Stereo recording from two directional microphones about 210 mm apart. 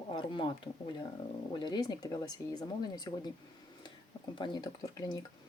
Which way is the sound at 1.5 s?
20° left (ahead or behind).